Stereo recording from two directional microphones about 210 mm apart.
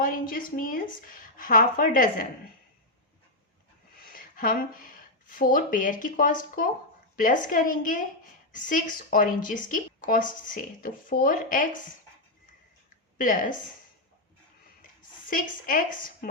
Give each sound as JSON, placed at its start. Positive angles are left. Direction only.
{"t": 0.0, "sound": "a woman's voice", "side_deg": 40}
{"t": 3.9, "sound": "a woman's voice", "side_deg": 45}
{"t": 13.1, "sound": "a woman's voice", "side_deg": 40}
{"t": 15.3, "sound": "a woman's voice", "side_deg": 40}